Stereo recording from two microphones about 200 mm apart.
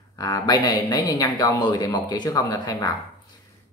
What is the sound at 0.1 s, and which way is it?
Speech, 20° left (ahead or behind).